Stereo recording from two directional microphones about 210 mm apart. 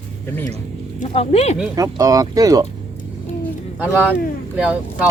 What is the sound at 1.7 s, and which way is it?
Speech, 15° right (ahead or behind).